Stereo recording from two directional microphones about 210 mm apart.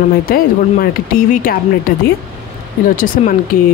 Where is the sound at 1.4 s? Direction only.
45° left (ahead or behind).